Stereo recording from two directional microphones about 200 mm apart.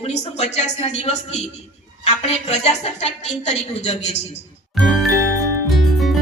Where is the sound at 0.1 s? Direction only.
35° left (ahead or behind).